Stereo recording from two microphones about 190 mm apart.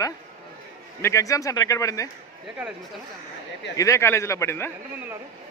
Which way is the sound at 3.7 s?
15° left (ahead or behind).